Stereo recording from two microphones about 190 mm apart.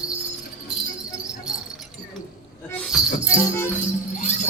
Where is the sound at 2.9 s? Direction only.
5° right (ahead or behind).